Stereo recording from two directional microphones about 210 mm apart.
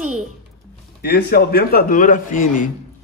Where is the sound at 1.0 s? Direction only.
50° left (ahead or behind).